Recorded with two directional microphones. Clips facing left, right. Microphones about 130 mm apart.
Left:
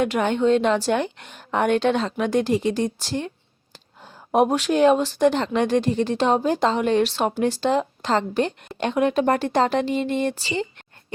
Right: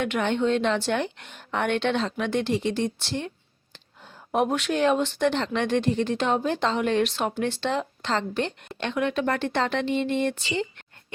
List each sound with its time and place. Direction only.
0.0 s a woman's voice: 40° left (ahead or behind)